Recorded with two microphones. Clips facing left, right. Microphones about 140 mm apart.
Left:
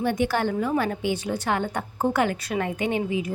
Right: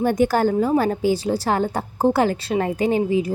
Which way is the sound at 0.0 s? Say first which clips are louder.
Right 6 dB; 40° right (ahead or behind).